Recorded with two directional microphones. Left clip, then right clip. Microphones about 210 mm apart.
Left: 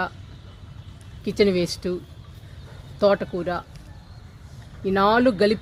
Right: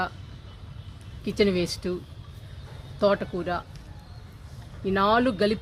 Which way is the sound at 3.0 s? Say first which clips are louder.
Left 4 dB; 40° left (ahead or behind).